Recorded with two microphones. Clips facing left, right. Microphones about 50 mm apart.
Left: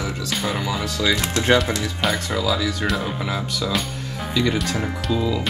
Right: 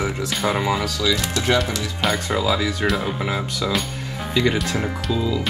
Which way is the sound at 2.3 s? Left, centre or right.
Right.